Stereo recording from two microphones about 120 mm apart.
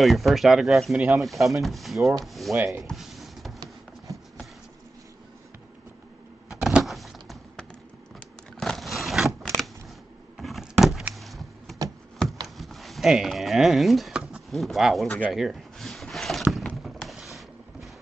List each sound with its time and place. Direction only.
0.0 s speech: centre (ahead or behind)
0.9 s speech: 10° right (ahead or behind)
1.2 s speech: centre (ahead or behind)
2.5 s speech: 15° right (ahead or behind)
2.9 s music: centre (ahead or behind)
6.5 s power windows: 5° right (ahead or behind)
6.9 s a sound: centre (ahead or behind)
11.1 s vehicle: centre (ahead or behind)
12.5 s a sound: centre (ahead or behind)